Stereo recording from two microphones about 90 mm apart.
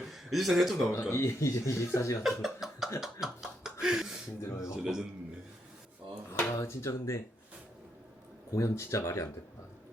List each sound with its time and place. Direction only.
0.0 s speech: centre (ahead or behind)
1.1 s speech: 30° left (ahead or behind)
2.2 s speech: 5° right (ahead or behind)
3.0 s beatboxing: 5° right (ahead or behind)
4.4 s speech: 35° left (ahead or behind)
4.7 s a man's voice: 5° right (ahead or behind)
6.3 s speech: 30° left (ahead or behind)
8.5 s speech: 35° left (ahead or behind)